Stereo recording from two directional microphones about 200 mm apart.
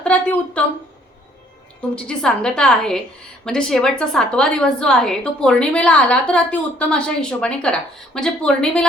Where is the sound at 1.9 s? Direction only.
5° left (ahead or behind).